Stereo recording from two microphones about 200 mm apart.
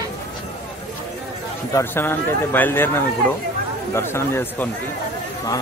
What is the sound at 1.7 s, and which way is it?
A man's voice, 10° left (ahead or behind).